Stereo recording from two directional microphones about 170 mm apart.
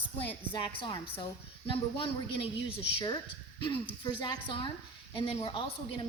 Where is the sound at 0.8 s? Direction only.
30° left (ahead or behind).